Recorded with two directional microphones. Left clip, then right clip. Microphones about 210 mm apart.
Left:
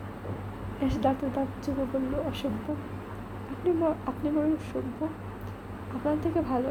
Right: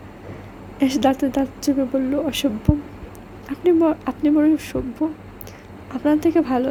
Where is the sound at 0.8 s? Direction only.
55° right (ahead or behind).